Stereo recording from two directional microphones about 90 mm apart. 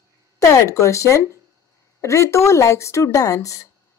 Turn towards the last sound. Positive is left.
turn(degrees=40)  # may be behind; listen again after turning